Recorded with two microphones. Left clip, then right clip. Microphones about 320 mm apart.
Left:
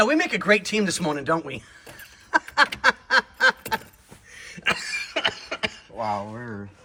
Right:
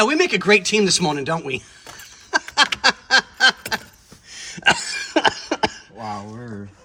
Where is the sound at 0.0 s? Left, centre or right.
Centre.